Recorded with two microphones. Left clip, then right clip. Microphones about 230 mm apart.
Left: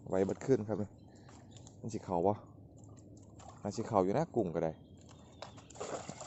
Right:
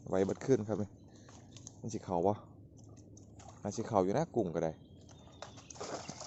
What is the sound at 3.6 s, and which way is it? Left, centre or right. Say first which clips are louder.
Speech: even; centre.